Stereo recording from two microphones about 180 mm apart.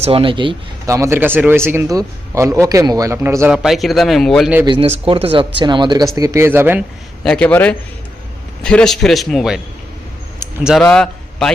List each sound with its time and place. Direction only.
0.0 s speech: 30° right (ahead or behind)
0.9 s a man's voice: 15° right (ahead or behind)
3.5 s speech: centre (ahead or behind)
4.6 s a man's voice: 30° right (ahead or behind); by 6.8 s 10° right (ahead or behind)
7.3 s a man's voice: 5° left (ahead or behind)
10.6 s a man's voice: centre (ahead or behind)